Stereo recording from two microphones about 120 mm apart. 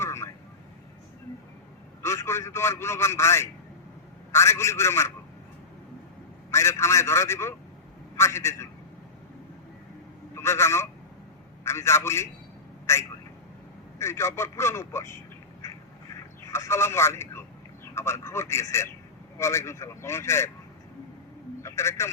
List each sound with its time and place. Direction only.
0.0 s vehicle: 20° left (ahead or behind)
2.0 s a man's voice: 20° left (ahead or behind)
6.5 s speech: 25° left (ahead or behind)
10.3 s speech: 20° left (ahead or behind)
12.8 s telephone: 20° left (ahead or behind)
14.0 s speech: 20° left (ahead or behind)
15.6 s duck: 20° left (ahead or behind)
16.5 s speech: 20° left (ahead or behind)
21.6 s a man's voice: 25° left (ahead or behind)